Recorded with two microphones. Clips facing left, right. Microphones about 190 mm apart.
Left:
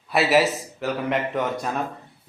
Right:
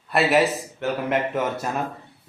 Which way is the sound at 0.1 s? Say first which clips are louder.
Even; centre (ahead or behind).